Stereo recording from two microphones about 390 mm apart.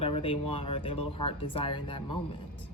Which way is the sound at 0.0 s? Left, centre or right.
Centre.